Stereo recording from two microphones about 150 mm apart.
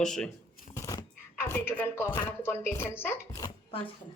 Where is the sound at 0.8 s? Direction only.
20° left (ahead or behind).